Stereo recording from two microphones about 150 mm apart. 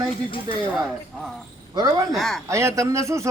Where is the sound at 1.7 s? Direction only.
25° right (ahead or behind).